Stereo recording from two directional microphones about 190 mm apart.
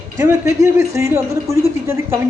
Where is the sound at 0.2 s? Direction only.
15° right (ahead or behind).